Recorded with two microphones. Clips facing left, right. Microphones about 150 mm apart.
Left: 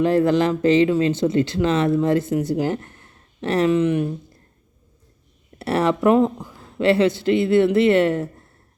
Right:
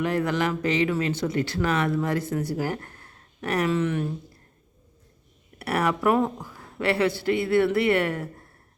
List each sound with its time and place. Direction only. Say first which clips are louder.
0.0 s speech: left 7 dB; 30° left (ahead or behind)
5.5 s speech: left 5 dB; 25° left (ahead or behind)